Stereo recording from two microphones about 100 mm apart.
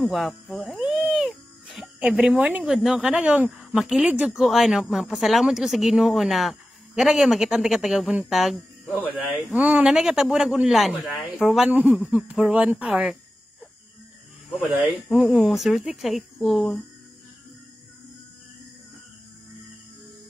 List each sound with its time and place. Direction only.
0.0 s music: centre (ahead or behind)
2.0 s speech: 10° right (ahead or behind)
9.5 s speech: 15° right (ahead or behind)
9.8 s speech: 5° right (ahead or behind)
11.7 s speech: 15° right (ahead or behind)
15.2 s speech: 5° right (ahead or behind)